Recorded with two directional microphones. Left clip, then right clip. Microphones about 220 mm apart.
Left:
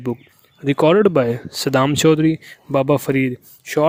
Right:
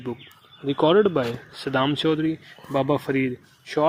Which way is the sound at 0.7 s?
55° left (ahead or behind).